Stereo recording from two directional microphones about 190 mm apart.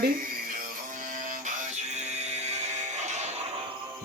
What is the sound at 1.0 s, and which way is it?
Music, 45° right (ahead or behind).